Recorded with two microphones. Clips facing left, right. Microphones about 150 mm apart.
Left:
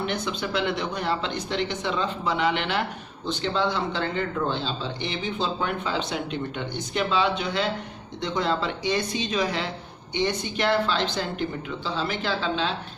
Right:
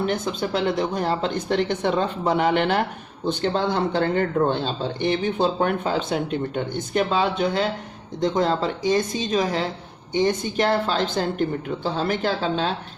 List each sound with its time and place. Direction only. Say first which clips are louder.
0.0 s speech: right 4 dB; 40° right (ahead or behind)